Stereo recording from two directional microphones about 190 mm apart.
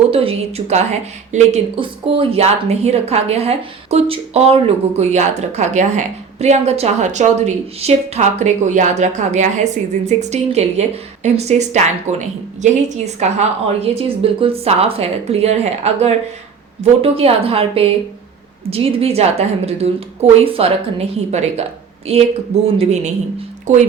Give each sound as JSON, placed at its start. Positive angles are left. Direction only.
{"t": 0.1, "sound": "a woman's voice", "side_deg": -30}